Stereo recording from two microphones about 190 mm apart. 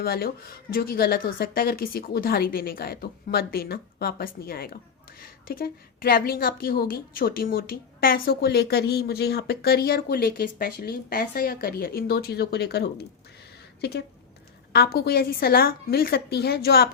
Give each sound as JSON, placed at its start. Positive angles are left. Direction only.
{"t": 0.0, "sound": "a woman's voice", "side_deg": 55}
{"t": 14.7, "sound": "a woman's voice", "side_deg": 55}